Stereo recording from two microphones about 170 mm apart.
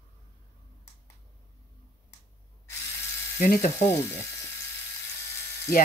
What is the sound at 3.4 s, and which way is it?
Speech, 60° left (ahead or behind).